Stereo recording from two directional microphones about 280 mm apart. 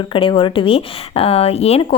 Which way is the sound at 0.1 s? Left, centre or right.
Centre.